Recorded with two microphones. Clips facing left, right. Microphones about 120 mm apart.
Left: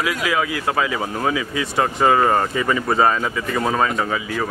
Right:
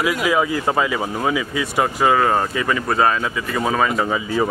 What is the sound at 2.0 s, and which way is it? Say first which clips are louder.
A man's voice: left 1 dB; centre (ahead or behind).